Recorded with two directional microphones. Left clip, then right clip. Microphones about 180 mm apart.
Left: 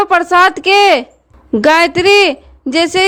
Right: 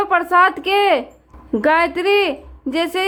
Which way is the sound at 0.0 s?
40° left (ahead or behind).